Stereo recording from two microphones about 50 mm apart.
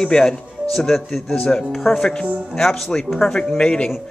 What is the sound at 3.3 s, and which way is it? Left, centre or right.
Speech, centre.